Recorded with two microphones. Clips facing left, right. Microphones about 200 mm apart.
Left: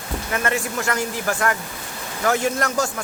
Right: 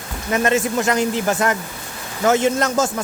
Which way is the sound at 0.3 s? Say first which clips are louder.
Right 7 dB; 20° right (ahead or behind).